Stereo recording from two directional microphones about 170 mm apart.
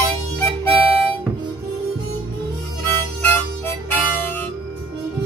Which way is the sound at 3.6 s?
10° left (ahead or behind).